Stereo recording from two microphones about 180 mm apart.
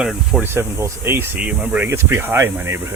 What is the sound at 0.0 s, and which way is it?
Speech, 5° right (ahead or behind).